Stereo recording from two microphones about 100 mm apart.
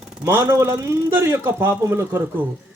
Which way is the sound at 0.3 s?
25° right (ahead or behind).